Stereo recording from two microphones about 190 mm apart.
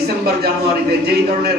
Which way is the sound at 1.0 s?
60° right (ahead or behind).